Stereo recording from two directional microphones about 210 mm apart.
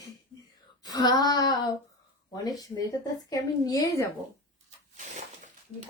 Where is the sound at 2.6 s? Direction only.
20° left (ahead or behind).